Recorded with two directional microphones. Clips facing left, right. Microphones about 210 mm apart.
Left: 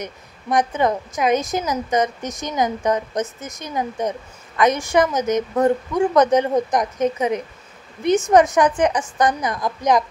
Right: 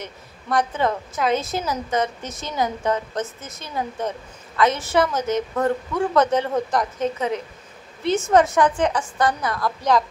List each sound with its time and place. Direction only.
0.0 s a woman's voice: 15° left (ahead or behind)